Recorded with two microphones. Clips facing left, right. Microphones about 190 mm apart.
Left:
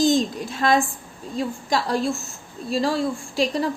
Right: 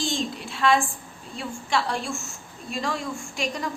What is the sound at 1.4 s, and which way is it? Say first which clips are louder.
A woman's voice: left 3 dB; 35° left (ahead or behind).